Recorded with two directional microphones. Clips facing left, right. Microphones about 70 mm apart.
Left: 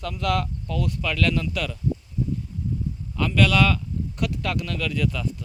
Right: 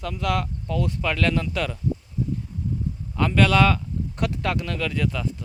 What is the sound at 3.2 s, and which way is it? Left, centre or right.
Speech, right.